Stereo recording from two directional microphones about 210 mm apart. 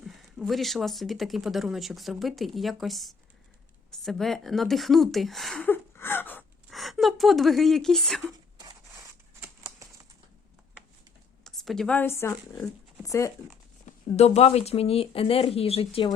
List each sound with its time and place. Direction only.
0.0 s a woman's voice: centre (ahead or behind)
8.3 s a sound: 15° right (ahead or behind)
11.4 s a woman's voice: centre (ahead or behind)
14.2 s speech: 30° left (ahead or behind)